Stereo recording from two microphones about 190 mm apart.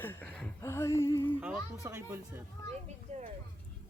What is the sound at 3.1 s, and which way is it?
Vehicle, 35° right (ahead or behind).